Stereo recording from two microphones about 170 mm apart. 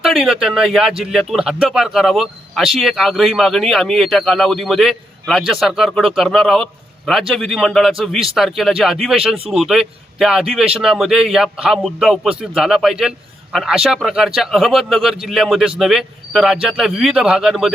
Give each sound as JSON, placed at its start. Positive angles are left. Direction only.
{"t": 0.0, "sound": "speech", "side_deg": 0}